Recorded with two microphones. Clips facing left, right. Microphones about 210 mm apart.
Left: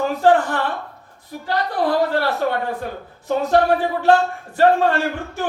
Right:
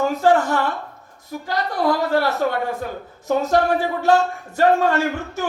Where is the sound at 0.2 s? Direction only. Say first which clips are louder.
Left 2 dB; 45° right (ahead or behind).